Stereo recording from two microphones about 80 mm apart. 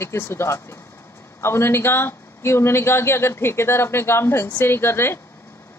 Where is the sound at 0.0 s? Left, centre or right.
Left.